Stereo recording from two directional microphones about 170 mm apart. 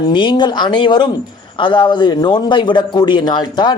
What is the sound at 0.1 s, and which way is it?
A man's voice, 25° left (ahead or behind).